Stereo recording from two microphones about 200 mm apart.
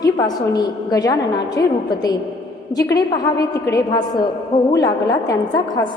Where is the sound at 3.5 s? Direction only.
20° left (ahead or behind).